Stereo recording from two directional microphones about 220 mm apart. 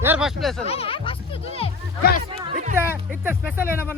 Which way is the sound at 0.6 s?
25° left (ahead or behind).